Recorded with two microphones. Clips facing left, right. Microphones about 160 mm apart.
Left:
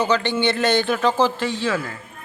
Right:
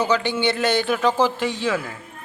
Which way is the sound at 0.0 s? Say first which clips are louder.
Left 1 dB; 10° right (ahead or behind).